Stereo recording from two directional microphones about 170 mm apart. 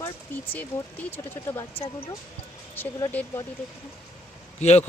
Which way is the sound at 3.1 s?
10° left (ahead or behind).